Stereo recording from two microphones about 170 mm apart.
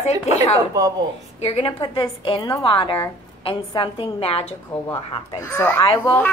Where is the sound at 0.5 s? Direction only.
20° right (ahead or behind).